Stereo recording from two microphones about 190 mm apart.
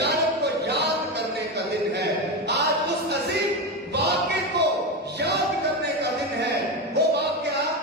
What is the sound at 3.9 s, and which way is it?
Music, 60° right (ahead or behind).